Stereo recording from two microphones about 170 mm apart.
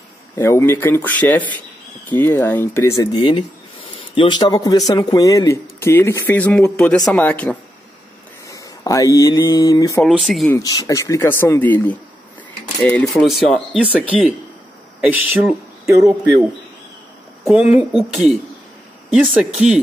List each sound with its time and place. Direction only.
0.4 s speech: 15° left (ahead or behind)
10.0 s speech: centre (ahead or behind)
10.5 s speech: 20° left (ahead or behind); by 15.5 s 5° right (ahead or behind)
15.8 s speech: 20° right (ahead or behind)
17.5 s speech: 5° right (ahead or behind)